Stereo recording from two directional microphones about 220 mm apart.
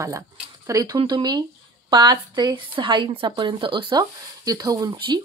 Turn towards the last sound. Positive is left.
turn(degrees=-15)  # may be behind; listen again after turning